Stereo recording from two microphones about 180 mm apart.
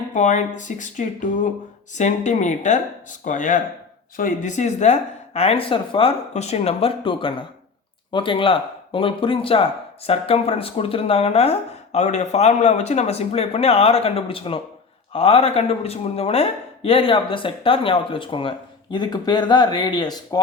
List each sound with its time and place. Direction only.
0.1 s speech: 40° left (ahead or behind); by 20.4 s 25° left (ahead or behind)